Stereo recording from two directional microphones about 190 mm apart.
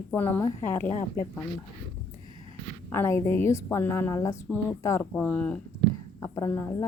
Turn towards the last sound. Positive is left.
turn(degrees=15)  # may be behind; listen again after turning